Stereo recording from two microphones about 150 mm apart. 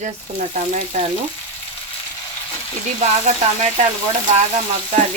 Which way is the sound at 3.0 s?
50° right (ahead or behind).